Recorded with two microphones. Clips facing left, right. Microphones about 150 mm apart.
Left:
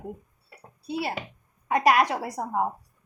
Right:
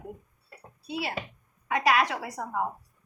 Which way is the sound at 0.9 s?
40° left (ahead or behind).